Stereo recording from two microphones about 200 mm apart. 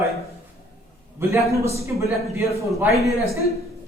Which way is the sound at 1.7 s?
15° right (ahead or behind).